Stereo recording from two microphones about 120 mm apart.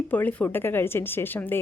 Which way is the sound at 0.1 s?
15° left (ahead or behind).